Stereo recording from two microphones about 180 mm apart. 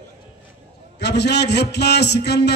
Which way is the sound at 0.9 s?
70° left (ahead or behind).